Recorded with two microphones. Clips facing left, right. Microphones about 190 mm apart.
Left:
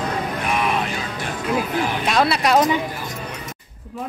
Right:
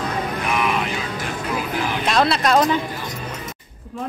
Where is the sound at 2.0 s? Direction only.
5° left (ahead or behind).